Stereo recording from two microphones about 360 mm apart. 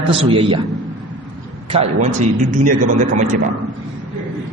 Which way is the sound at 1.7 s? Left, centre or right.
Centre.